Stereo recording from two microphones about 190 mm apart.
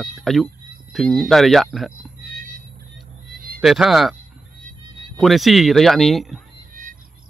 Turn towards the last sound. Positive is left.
turn(degrees=-45)  # may be behind; listen again after turning